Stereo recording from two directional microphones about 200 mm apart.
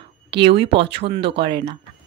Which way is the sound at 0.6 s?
25° right (ahead or behind).